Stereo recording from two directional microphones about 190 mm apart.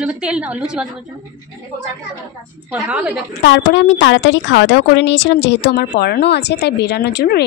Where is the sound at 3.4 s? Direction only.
70° left (ahead or behind).